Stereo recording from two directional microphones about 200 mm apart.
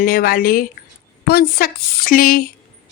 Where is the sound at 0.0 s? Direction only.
45° left (ahead or behind).